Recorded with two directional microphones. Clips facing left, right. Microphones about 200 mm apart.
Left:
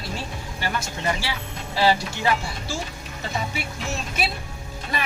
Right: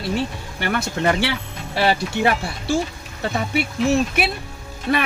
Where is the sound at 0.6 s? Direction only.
65° right (ahead or behind).